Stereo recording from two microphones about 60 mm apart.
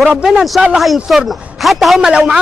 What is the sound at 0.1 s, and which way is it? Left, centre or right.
Speech, centre.